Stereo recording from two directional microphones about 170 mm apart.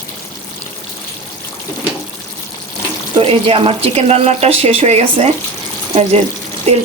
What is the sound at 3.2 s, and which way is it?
Speech, 35° right (ahead or behind).